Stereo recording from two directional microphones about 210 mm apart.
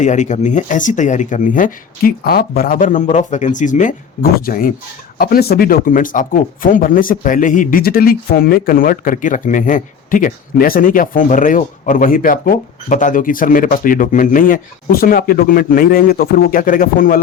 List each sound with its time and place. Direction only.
0.0 s speech: 35° left (ahead or behind)